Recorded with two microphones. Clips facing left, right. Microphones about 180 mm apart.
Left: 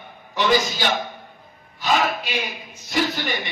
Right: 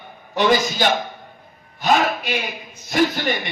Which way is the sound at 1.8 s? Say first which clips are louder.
Right 3 dB; 50° right (ahead or behind).